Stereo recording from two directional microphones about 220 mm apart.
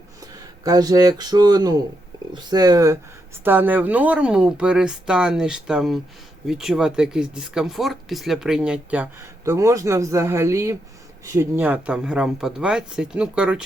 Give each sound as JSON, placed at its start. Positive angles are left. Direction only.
{"t": 0.2, "sound": "speech", "side_deg": -15}